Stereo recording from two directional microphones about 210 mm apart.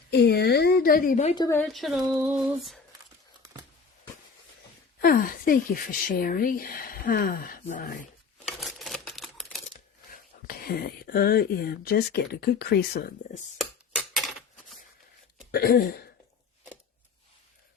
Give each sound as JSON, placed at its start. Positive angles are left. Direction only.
{"t": 0.1, "sound": "a woman's voice", "side_deg": 50}
{"t": 1.5, "sound": "speech", "side_deg": 5}
{"t": 4.9, "sound": "a woman's voice", "side_deg": 45}
{"t": 8.4, "sound": "camera", "side_deg": 0}
{"t": 10.1, "sound": "speech", "side_deg": 45}
{"t": 13.6, "sound": "a sound", "side_deg": 0}
{"t": 15.5, "sound": "a woman's voice", "side_deg": 45}